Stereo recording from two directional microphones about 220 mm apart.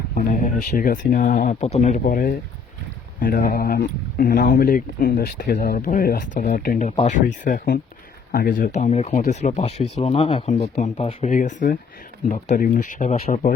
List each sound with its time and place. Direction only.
0.1 s speech: 40° left (ahead or behind)